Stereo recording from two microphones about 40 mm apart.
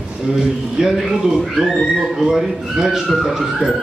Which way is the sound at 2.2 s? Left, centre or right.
Centre.